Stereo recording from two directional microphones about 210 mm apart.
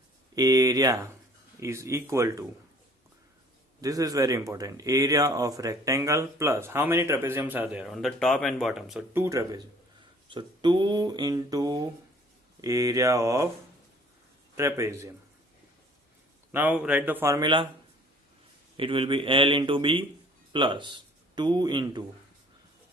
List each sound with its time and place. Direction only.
0.3 s speech: 15° right (ahead or behind)
3.8 s speech: 15° right (ahead or behind)
14.5 s speech: 15° right (ahead or behind)
16.5 s speech: 10° right (ahead or behind)
18.8 s speech: 25° right (ahead or behind)